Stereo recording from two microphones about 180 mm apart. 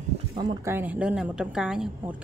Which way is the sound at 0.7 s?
10° right (ahead or behind).